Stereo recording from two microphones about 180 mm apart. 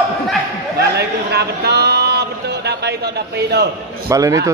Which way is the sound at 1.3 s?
65° right (ahead or behind).